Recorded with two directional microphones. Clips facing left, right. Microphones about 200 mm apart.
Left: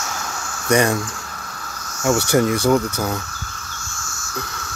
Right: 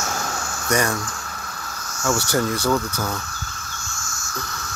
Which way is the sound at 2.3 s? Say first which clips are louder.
Left 5 dB; 15° left (ahead or behind).